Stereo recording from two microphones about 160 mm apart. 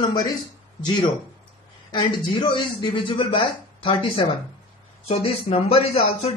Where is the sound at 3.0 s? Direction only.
30° left (ahead or behind).